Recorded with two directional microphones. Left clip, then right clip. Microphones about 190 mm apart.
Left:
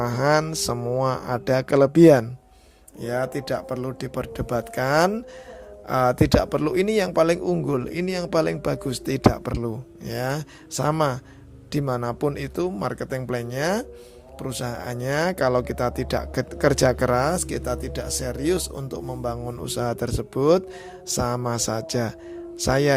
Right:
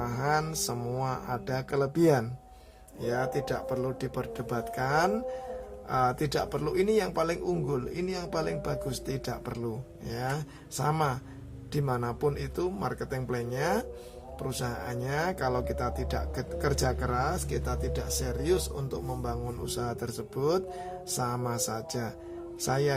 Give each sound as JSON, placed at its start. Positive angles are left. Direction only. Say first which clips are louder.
{"t": 0.0, "sound": "speech", "louder": "left 8 dB", "side_deg": 45}